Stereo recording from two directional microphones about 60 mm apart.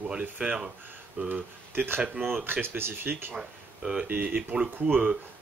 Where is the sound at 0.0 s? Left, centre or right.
Centre; by 3.3 s right.